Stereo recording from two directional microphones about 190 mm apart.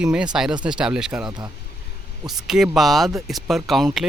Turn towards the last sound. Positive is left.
turn(degrees=0)  # may be behind; listen again after turning